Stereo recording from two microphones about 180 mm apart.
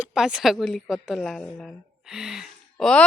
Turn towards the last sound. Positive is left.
turn(degrees=0)  # may be behind; listen again after turning